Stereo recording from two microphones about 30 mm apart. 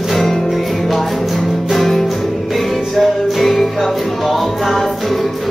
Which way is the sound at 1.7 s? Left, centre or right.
Centre.